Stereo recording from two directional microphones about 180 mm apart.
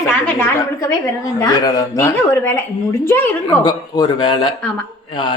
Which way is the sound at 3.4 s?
25° left (ahead or behind).